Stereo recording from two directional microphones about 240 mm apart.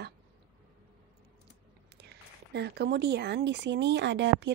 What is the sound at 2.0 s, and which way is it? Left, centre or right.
Speech, right.